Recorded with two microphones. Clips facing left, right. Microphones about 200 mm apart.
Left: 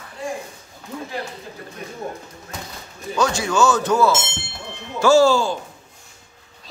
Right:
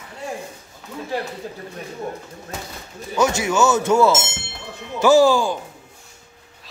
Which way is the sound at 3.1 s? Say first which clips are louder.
Right 1 dB; 20° right (ahead or behind).